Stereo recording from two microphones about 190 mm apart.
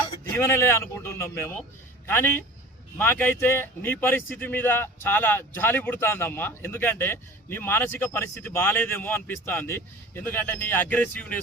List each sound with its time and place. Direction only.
0.3 s a man's voice: 10° left (ahead or behind)